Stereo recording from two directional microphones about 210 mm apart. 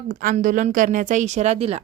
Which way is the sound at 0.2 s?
40° right (ahead or behind).